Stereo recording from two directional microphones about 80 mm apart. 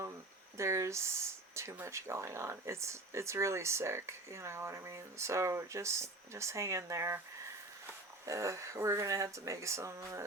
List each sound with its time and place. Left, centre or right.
0.5 s speech: right